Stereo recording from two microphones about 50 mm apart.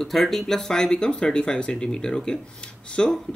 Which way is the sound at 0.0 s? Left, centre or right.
Centre.